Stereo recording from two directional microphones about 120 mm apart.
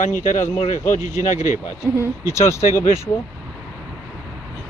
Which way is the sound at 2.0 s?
25° left (ahead or behind).